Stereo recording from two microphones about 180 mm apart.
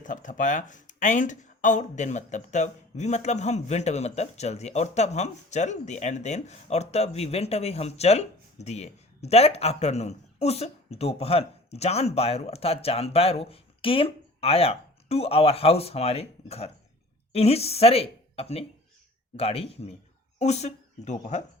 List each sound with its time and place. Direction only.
0.0 s speech: 45° left (ahead or behind)